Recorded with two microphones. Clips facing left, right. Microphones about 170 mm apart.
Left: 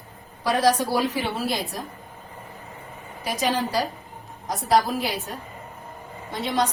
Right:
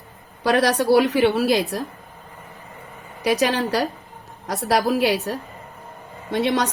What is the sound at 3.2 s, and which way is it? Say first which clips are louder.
A woman's voice: right 5 dB; 75° right (ahead or behind).